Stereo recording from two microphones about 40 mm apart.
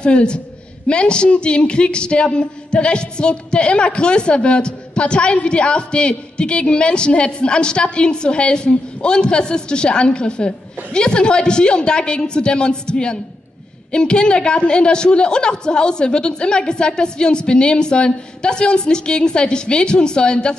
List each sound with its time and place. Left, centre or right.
0.0 s speech: left